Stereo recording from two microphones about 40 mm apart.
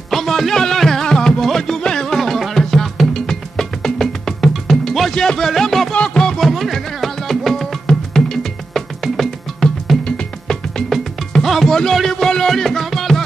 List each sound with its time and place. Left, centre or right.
0.1 s music: centre
5.1 s music: centre
6.4 s music: centre
10.0 s music: centre
11.3 s music: centre
11.7 s a sound: centre